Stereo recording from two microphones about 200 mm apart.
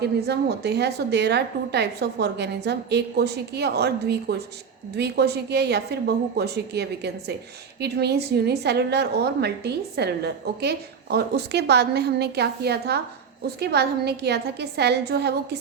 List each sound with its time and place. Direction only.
0.0 s a woman's voice: 55° right (ahead or behind)